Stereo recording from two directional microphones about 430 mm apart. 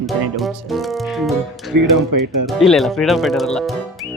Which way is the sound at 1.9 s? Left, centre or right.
Right.